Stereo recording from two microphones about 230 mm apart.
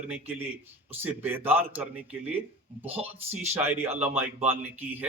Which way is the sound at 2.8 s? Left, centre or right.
Right.